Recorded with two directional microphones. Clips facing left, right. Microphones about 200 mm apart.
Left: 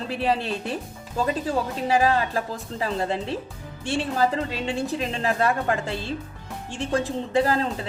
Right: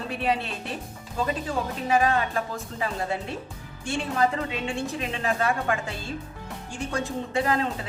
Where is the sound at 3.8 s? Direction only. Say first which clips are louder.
Left 2 dB; 30° left (ahead or behind).